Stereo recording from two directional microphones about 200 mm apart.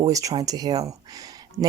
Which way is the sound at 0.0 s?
15° right (ahead or behind).